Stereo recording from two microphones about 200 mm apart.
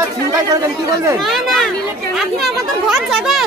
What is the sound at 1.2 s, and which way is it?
Speech, centre (ahead or behind).